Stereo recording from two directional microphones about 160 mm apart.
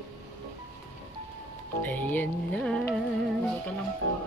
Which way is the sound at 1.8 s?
10° left (ahead or behind).